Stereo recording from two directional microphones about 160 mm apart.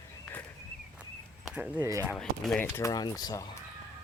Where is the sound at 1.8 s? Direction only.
15° right (ahead or behind).